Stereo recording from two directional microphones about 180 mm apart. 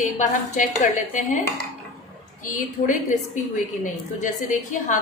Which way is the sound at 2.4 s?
45° left (ahead or behind).